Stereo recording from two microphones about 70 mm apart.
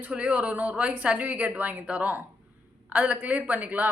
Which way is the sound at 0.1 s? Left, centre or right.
Centre.